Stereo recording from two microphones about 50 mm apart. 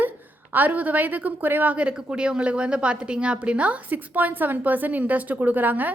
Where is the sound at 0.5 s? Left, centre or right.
Right.